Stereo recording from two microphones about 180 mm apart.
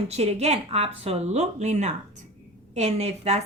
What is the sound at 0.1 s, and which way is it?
Speech, 35° right (ahead or behind).